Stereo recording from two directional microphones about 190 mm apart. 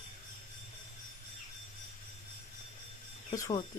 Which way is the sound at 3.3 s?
20° left (ahead or behind).